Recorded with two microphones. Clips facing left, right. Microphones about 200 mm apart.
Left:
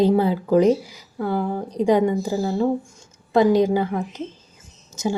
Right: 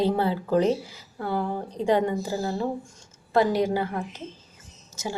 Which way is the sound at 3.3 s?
15° left (ahead or behind).